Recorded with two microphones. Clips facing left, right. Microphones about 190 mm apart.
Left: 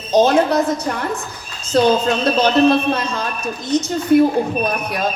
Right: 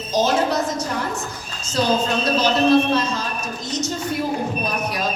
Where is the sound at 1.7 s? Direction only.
55° left (ahead or behind).